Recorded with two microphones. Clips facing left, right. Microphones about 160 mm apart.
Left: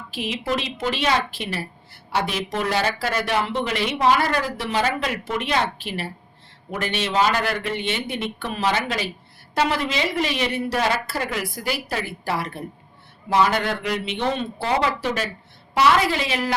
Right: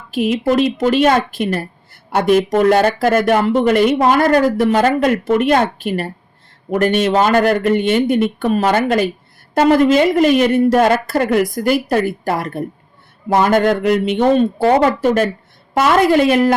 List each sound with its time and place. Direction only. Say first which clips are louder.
0.1 s speech: right 11 dB; 50° right (ahead or behind)